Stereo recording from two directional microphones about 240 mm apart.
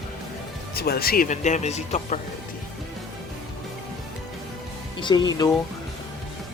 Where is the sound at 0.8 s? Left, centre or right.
Left.